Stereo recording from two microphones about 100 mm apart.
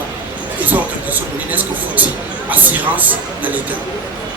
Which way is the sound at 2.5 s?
15° right (ahead or behind).